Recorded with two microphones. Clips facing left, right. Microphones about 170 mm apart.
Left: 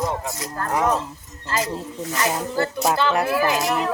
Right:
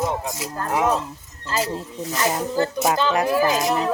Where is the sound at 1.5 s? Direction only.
30° right (ahead or behind).